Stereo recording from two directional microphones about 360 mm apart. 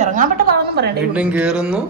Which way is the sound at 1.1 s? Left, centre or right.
Centre.